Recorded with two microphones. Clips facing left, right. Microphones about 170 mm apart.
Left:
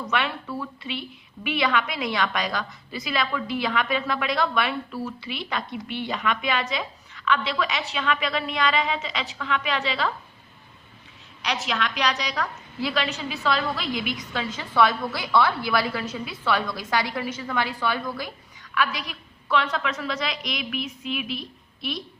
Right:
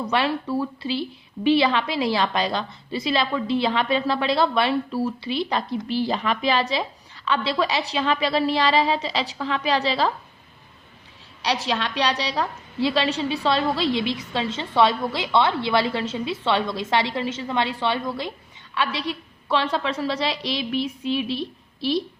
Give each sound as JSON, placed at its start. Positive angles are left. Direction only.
{"t": 0.1, "sound": "a woman's voice", "side_deg": -35}
{"t": 11.4, "sound": "a woman's voice", "side_deg": -30}